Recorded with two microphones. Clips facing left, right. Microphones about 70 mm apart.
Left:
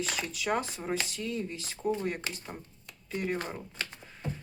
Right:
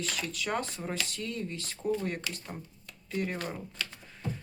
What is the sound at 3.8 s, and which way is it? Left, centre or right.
Speech, left.